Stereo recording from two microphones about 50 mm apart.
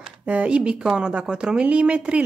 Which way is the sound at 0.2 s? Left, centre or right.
Right.